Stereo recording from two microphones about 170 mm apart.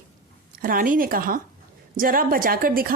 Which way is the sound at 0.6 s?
55° right (ahead or behind).